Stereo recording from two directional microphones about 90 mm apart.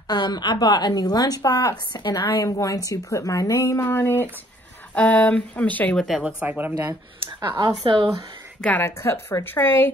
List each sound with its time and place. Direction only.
0.1 s a woman's voice: 50° left (ahead or behind); by 3.8 s 35° left (ahead or behind)
3.8 s a woman's voice: 20° left (ahead or behind)
6.2 s speech: 15° right (ahead or behind)
7.4 s speech: 50° right (ahead or behind)
7.8 s speech: 70° right (ahead or behind)
8.5 s a woman's voice: 15° left (ahead or behind)
8.8 s a woman's voice: 30° left (ahead or behind)